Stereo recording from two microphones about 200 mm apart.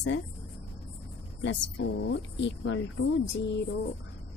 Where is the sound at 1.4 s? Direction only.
60° left (ahead or behind).